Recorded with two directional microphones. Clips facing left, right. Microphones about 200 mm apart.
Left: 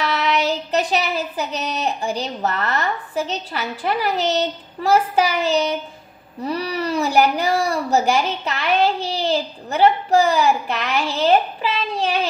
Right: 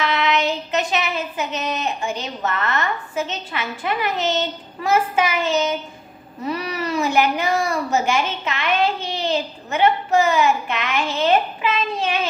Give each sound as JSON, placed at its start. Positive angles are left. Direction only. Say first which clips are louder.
{"t": 0.0, "sound": "child singing", "louder": "even", "side_deg": 35}
{"t": 0.5, "sound": "a woman's voice", "louder": "left 2 dB", "side_deg": 35}